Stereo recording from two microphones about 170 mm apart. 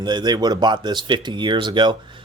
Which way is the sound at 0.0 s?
25° right (ahead or behind).